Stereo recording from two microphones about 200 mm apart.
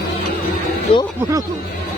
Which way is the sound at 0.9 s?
30° left (ahead or behind).